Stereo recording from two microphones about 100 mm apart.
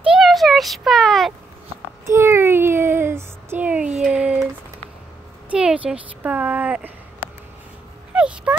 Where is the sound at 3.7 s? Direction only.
10° right (ahead or behind).